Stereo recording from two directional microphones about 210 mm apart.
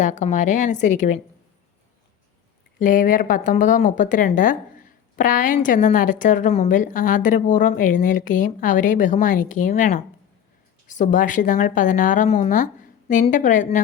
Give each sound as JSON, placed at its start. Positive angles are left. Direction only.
{"t": 0.0, "sound": "a woman's voice", "side_deg": 35}
{"t": 2.7, "sound": "a woman's voice", "side_deg": 40}